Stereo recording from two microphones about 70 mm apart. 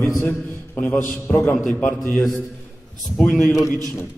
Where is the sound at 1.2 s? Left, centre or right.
Left.